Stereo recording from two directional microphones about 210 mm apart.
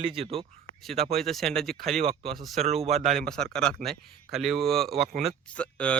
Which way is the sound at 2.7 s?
30° right (ahead or behind).